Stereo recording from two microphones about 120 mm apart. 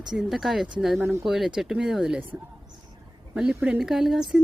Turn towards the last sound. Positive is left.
turn(degrees=-5)  # may be behind; listen again after turning